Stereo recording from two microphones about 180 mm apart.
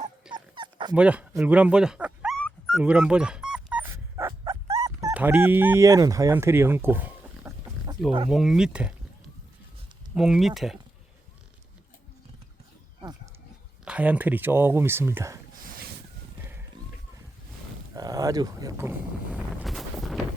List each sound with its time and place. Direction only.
0.3 s dog: 25° right (ahead or behind)
0.9 s speech: 5° right (ahead or behind)
2.4 s dog: 5° left (ahead or behind); by 5.1 s 20° right (ahead or behind)
5.1 s speech: 10° right (ahead or behind)
8.3 s speech: centre (ahead or behind)
10.2 s speech: centre (ahead or behind)
13.8 s speech: 5° right (ahead or behind)
15.5 s boat: 50° right (ahead or behind)
17.9 s speech: 20° right (ahead or behind)
19.6 s wind noise: centre (ahead or behind)